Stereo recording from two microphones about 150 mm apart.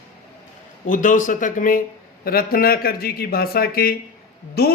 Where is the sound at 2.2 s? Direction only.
80° left.